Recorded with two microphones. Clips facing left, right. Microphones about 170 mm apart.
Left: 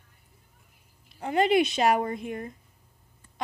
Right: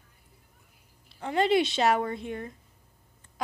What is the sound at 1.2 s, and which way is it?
Speech, 15° left (ahead or behind).